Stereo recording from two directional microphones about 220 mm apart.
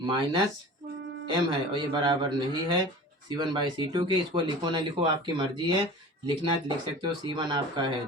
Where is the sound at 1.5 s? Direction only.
20° right (ahead or behind).